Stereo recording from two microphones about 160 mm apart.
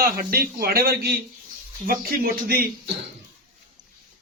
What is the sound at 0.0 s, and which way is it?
A man's voice, 70° right (ahead or behind).